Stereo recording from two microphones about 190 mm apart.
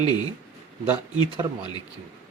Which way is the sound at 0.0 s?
20° left (ahead or behind).